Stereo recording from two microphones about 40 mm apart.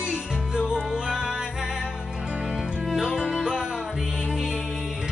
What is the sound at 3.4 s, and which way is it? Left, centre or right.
Music, centre.